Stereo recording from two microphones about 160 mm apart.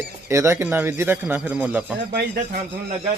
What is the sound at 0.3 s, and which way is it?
Speech, 20° right (ahead or behind).